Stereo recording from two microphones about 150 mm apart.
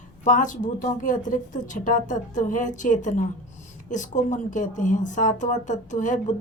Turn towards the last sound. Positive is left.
turn(degrees=55)  # may be behind; listen again after turning